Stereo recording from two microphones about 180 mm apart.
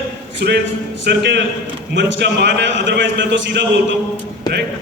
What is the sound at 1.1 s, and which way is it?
A man's voice, 70° right (ahead or behind).